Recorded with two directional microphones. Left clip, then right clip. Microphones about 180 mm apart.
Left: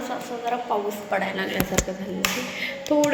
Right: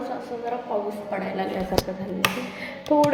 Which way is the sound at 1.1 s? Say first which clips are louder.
Left 4 dB; 5° right (ahead or behind).